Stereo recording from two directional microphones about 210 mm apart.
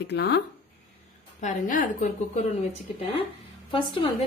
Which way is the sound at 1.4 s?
35° left (ahead or behind).